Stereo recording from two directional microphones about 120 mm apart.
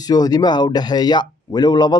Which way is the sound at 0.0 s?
35° left (ahead or behind).